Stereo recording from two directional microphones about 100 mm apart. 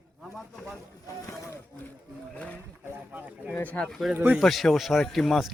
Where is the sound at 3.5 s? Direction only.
15° left (ahead or behind).